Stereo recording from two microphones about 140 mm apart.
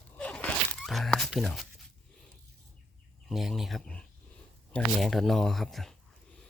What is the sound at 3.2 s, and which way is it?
Speech, centre (ahead or behind).